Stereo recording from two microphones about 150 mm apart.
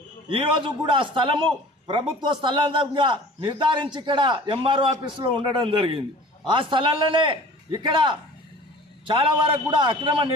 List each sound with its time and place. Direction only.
0.3 s a man's voice: 35° right (ahead or behind)